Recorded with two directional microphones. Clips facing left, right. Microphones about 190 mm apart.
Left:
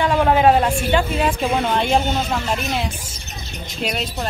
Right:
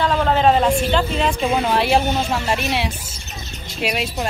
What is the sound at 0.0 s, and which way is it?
Speech, 10° left (ahead or behind).